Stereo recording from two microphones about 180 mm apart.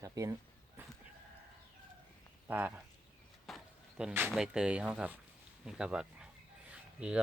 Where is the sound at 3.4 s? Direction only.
Centre (ahead or behind).